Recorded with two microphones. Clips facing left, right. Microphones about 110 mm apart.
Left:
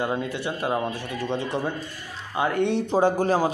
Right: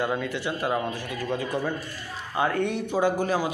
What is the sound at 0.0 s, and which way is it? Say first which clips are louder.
A man's voice: left 1 dB; 20° left (ahead or behind).